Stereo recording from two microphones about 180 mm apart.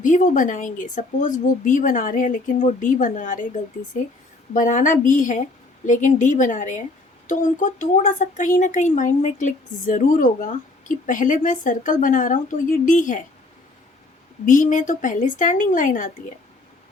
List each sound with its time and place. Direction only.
0.0 s speech: 45° left (ahead or behind)
14.4 s speech: 45° left (ahead or behind)